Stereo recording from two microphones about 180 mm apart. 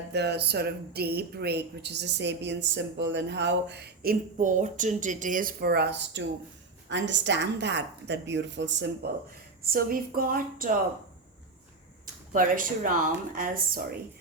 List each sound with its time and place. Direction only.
0.1 s speech: 70° right (ahead or behind)
6.8 s a woman's voice: 90° right
9.6 s a woman's voice: 55° right (ahead or behind)
12.3 s a woman's voice: 50° right (ahead or behind)